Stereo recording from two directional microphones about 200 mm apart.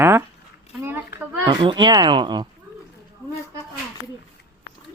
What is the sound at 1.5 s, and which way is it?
Speech, 20° right (ahead or behind).